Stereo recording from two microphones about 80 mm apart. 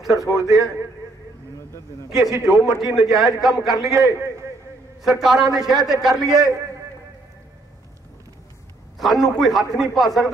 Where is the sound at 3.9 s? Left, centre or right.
Right.